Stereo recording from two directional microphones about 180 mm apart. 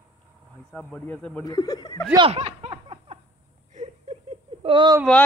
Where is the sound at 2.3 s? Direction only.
35° right (ahead or behind).